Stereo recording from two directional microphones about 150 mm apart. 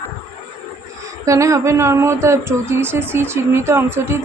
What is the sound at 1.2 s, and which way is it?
Speech, 20° right (ahead or behind).